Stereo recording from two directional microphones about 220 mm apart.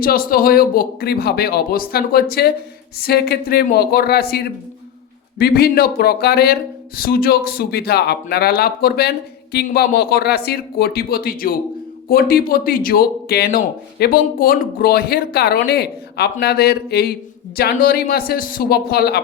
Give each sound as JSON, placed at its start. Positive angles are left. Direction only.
{"t": 0.0, "sound": "speech", "side_deg": 45}